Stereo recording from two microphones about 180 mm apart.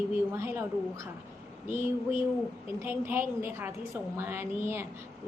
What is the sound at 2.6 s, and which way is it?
A woman's voice, 10° right (ahead or behind).